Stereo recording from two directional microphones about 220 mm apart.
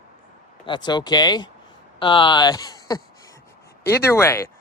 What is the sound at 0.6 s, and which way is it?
Speech, 20° left (ahead or behind).